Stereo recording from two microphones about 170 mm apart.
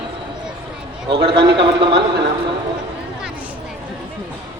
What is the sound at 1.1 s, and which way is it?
Speech, 30° right (ahead or behind).